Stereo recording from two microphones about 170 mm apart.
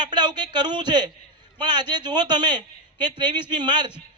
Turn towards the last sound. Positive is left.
turn(degrees=-25)  # may be behind; listen again after turning